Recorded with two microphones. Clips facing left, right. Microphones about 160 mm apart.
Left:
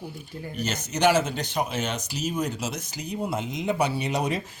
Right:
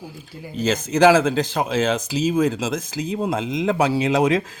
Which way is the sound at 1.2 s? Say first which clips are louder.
Right 7 dB; 90° right.